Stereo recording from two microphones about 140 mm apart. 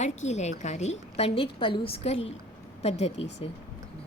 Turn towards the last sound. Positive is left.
turn(degrees=50)  # may be behind; listen again after turning